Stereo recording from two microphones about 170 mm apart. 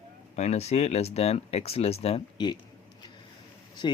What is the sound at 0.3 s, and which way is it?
Speech, 40° left (ahead or behind).